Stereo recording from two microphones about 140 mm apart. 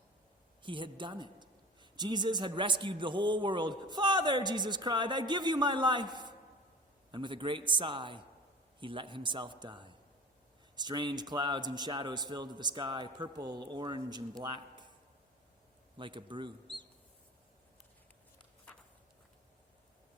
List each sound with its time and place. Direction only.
0.6 s a man's voice: 35° right (ahead or behind)
16.0 s a man's voice: 35° right (ahead or behind)